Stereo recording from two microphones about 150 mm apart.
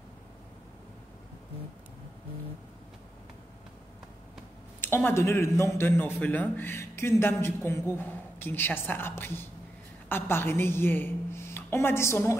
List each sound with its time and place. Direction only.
4.8 s a man's voice: 15° left (ahead or behind)